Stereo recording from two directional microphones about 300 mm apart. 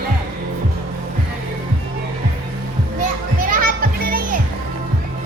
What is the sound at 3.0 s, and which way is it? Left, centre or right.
Children playing, right.